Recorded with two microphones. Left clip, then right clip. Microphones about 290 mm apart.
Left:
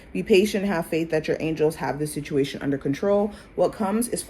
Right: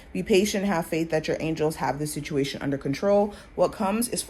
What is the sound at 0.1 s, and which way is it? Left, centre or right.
Speech, right.